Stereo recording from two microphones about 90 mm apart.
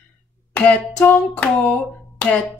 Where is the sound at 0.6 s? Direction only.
15° left (ahead or behind).